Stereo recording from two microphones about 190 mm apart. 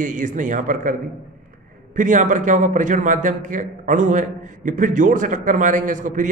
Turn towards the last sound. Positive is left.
turn(degrees=-45)  # may be behind; listen again after turning